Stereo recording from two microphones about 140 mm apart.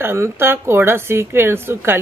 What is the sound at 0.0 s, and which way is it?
Speech, 15° right (ahead or behind).